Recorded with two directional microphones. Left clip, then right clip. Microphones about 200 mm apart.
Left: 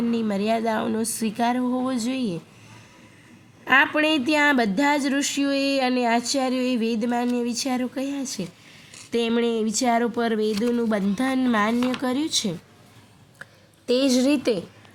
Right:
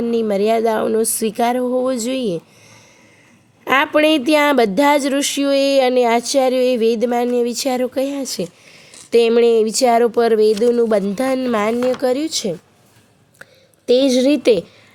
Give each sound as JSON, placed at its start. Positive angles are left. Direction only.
{"t": 0.1, "sound": "speech", "side_deg": -30}
{"t": 3.6, "sound": "speech", "side_deg": -35}
{"t": 13.4, "sound": "a sound", "side_deg": -20}